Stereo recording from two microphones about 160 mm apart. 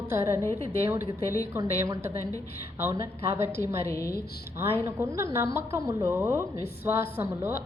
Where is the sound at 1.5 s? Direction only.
15° right (ahead or behind).